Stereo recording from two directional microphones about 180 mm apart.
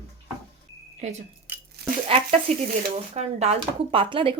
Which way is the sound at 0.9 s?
40° right (ahead or behind).